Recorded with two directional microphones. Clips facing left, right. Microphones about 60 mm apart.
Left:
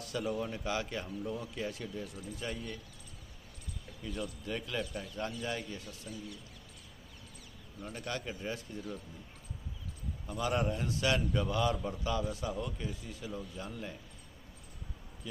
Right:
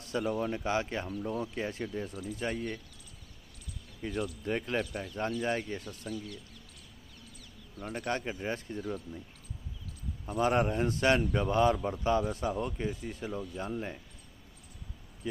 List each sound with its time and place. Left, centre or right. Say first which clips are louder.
0.0 s speech: right 4 dB; right
4.0 s speech: right 5 dB; right
7.8 s speech: right 5 dB; right
10.2 s speech: right 5 dB; right